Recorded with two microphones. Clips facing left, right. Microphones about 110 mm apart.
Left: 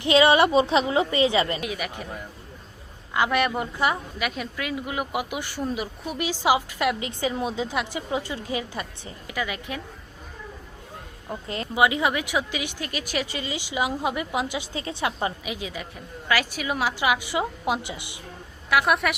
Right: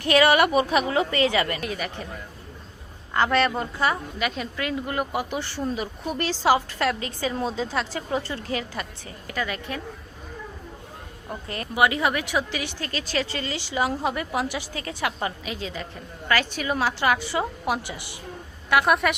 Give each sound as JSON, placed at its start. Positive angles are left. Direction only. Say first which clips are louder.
{"t": 0.0, "sound": "a woman's voice", "louder": "left 1 dB", "side_deg": 20}
{"t": 1.6, "sound": "speech", "louder": "right 1 dB", "side_deg": 10}
{"t": 3.2, "sound": "speech", "louder": "right 1 dB", "side_deg": 10}
{"t": 4.2, "sound": "speech", "louder": "right 2 dB", "side_deg": 5}
{"t": 11.4, "sound": "a woman's voice", "louder": "even", "side_deg": 20}
{"t": 18.7, "sound": "a woman's voice", "louder": "right 1 dB", "side_deg": 0}